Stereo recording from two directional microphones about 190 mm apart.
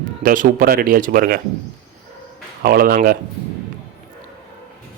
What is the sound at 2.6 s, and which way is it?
Speech, 50° right (ahead or behind).